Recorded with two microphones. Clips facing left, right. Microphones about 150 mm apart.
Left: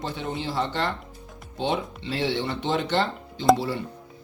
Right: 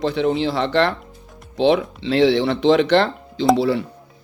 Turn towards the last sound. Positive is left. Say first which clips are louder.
# right 10 dB
turn(degrees=-90)